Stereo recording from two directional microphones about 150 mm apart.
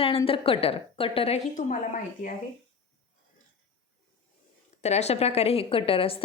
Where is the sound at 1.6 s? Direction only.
55° left (ahead or behind).